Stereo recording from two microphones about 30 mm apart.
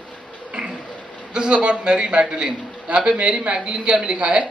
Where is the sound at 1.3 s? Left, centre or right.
Right.